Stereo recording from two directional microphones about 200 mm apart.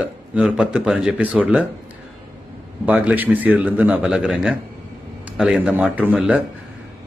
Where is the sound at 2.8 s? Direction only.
5° right (ahead or behind).